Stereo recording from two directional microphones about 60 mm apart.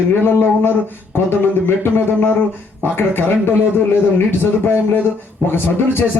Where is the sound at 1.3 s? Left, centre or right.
Left.